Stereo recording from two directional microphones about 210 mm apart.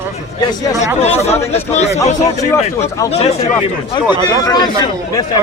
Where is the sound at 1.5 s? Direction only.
30° left (ahead or behind).